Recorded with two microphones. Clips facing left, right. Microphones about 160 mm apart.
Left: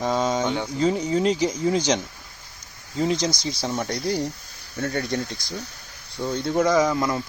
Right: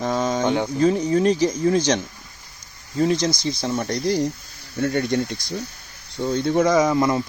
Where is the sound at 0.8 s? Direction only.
15° left (ahead or behind).